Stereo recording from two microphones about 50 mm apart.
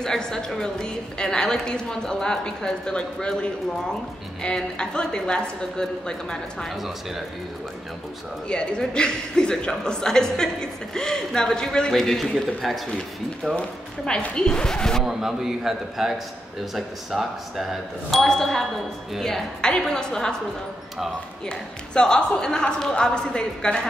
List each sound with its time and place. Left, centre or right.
0.0 s a woman's voice: centre
8.5 s a woman's voice: centre
13.6 s a woman's voice: centre
15.0 s a man's voice: centre
19.9 s a woman's voice: centre
21.5 s a woman's voice: centre